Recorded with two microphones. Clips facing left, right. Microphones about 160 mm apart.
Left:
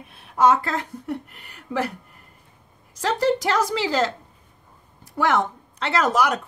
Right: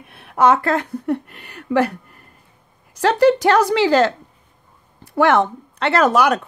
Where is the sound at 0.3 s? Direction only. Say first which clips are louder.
Right 4 dB; 65° right (ahead or behind).